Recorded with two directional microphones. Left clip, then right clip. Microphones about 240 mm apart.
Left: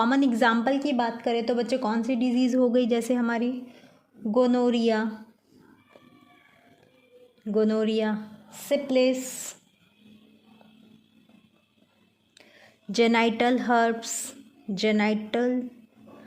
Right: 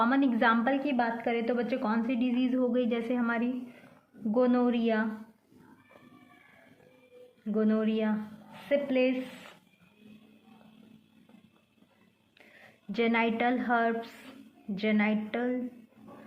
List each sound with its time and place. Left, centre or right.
0.0 s a woman's voice: left
7.4 s a woman's voice: left
12.9 s a woman's voice: left